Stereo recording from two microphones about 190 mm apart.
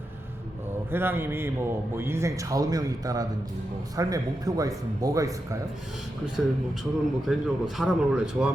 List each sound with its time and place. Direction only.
0.9 s a man's voice: 10° right (ahead or behind)
6.4 s a man's voice: centre (ahead or behind)